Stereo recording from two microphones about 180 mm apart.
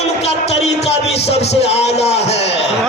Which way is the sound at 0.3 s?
35° left (ahead or behind).